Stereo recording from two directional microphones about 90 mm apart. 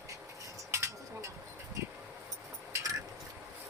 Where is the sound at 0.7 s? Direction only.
30° right (ahead or behind).